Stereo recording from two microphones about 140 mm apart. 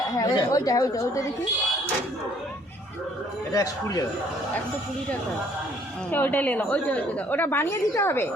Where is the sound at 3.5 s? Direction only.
25° left (ahead or behind).